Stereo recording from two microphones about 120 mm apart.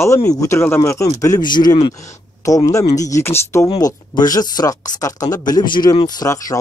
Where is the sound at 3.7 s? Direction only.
35° left (ahead or behind).